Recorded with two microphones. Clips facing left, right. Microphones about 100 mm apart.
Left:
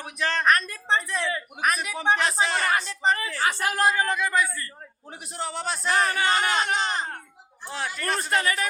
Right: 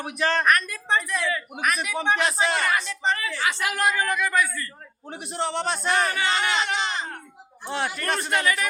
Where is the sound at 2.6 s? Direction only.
35° left (ahead or behind).